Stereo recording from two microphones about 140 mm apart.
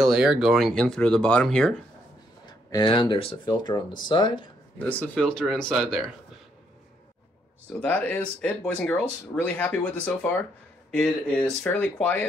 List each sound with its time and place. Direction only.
0.0 s speech: 5° right (ahead or behind)
2.4 s speech: 30° left (ahead or behind)
5.0 s speech: 10° left (ahead or behind)
7.8 s speech: 10° left (ahead or behind)